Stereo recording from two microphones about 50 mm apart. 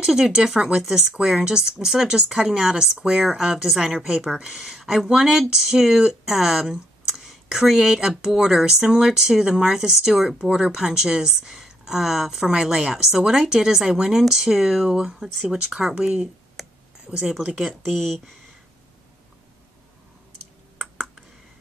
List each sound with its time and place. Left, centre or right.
0.0 s speech: centre
16.6 s a sound: centre
17.2 s speech: centre
20.7 s computer keyboard: centre